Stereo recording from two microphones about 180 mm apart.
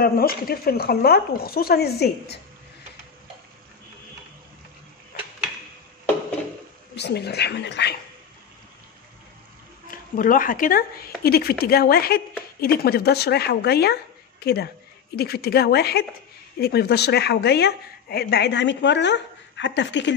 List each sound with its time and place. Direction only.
0.0 s speech: 55° left (ahead or behind)
7.0 s speech: 65° left (ahead or behind)
10.1 s speech: 50° left (ahead or behind); by 20.1 s 80° left